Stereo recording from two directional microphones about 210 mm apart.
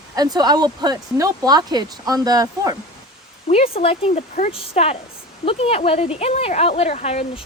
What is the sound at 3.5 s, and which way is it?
Speech, 30° left (ahead or behind).